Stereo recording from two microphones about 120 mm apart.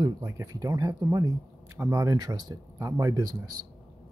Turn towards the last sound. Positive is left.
turn(degrees=-35)  # may be behind; listen again after turning